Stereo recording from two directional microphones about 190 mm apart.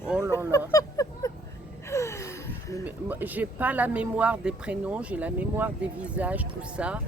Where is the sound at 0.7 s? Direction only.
15° left (ahead or behind).